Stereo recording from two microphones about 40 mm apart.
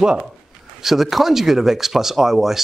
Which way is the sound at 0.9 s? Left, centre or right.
Centre.